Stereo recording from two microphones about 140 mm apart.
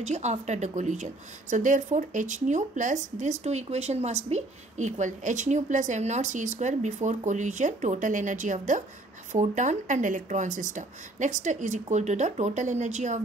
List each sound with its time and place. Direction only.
0.0 s speech: 55° right (ahead or behind)